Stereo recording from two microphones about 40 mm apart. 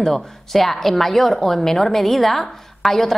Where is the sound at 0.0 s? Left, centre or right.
Centre.